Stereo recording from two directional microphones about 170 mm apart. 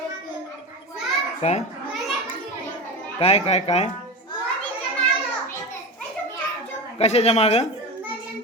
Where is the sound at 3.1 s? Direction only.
40° left (ahead or behind).